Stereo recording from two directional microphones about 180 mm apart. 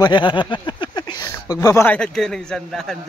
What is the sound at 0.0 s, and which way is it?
Speech, 25° left (ahead or behind).